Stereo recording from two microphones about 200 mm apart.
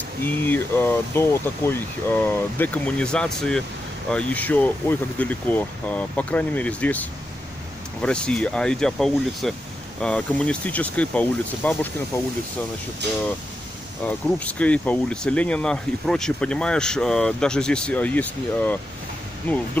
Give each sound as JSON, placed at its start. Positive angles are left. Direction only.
{"t": 0.2, "sound": "speech", "side_deg": 10}
{"t": 13.0, "sound": "speech", "side_deg": -60}
{"t": 14.0, "sound": "speech", "side_deg": 5}